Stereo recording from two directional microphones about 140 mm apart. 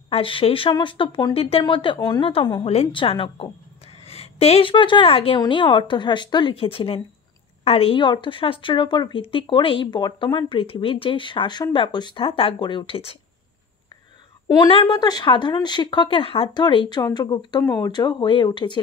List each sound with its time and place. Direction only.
0.1 s a woman's voice: 40° left (ahead or behind)
2.6 s a woman's voice: 45° left (ahead or behind)
14.5 s a woman's voice: 30° left (ahead or behind)